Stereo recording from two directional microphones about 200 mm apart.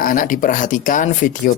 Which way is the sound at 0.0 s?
40° left (ahead or behind).